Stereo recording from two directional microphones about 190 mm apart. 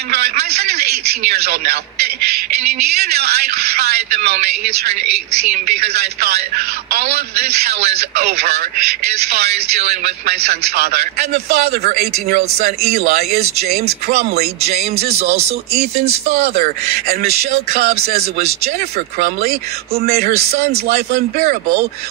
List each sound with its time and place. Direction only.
0.1 s a man's voice: 55° right (ahead or behind)
3.0 s a man's voice: 55° right (ahead or behind)
5.5 s a man's voice: 55° right (ahead or behind)
8.0 s a man's voice: 55° right (ahead or behind)
15.1 s speech: 35° right (ahead or behind)
16.3 s speech: 55° right (ahead or behind)